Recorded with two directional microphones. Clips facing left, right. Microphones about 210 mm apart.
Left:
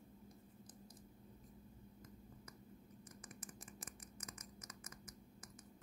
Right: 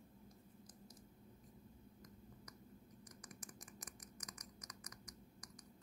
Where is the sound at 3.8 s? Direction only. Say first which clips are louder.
Left 2 dB; 25° left (ahead or behind).